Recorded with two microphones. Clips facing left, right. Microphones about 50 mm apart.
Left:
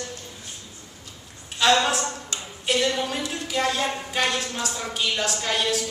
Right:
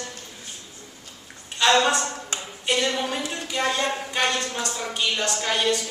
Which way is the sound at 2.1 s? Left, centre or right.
Right.